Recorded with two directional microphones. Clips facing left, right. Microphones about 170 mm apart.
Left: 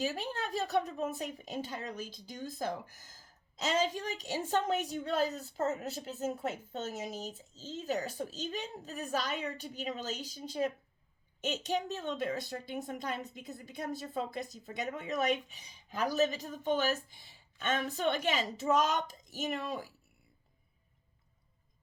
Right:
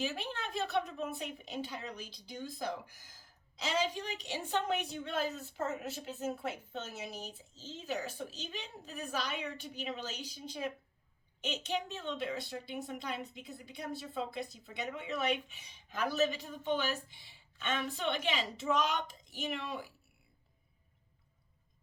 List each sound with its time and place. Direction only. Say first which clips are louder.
0.0 s a woman's voice: left 3 dB; 40° left (ahead or behind)